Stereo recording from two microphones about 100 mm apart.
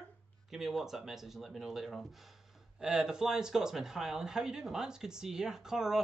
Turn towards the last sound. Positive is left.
turn(degrees=-5)  # may be behind; listen again after turning